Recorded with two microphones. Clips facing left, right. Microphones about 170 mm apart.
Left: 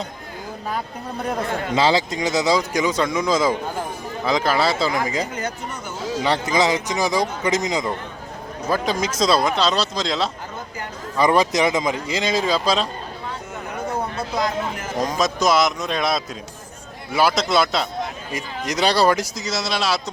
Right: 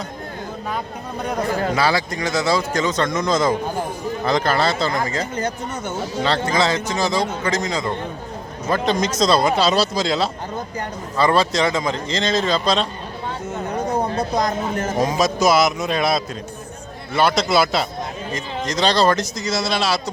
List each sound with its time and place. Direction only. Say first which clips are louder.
1.7 s speech: left 1 dB; 20° left (ahead or behind); by 4.7 s 5° left (ahead or behind)
5.0 s speech: right 1 dB; 15° left (ahead or behind)
8.7 s speech: right 2 dB; 5° left (ahead or behind)
11.2 s speech: even; 15° left (ahead or behind)
14.0 s a sound: right 5 dB; 40° right (ahead or behind)
14.3 s speech: even; 40° right (ahead or behind)
14.9 s speech: right 2 dB; 5° right (ahead or behind)
18.6 s speech: even; 10° left (ahead or behind)